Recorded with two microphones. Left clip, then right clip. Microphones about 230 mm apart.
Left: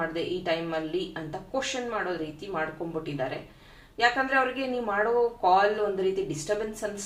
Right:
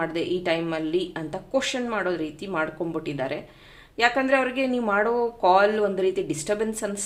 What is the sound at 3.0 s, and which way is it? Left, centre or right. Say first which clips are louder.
Speech: even; right.